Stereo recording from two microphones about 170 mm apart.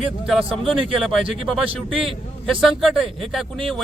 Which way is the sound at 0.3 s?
5° right (ahead or behind).